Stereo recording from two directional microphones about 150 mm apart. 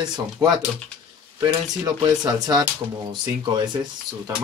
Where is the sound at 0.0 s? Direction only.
30° right (ahead or behind).